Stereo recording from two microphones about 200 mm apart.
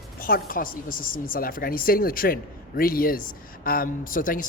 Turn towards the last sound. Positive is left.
turn(degrees=45)  # may be behind; listen again after turning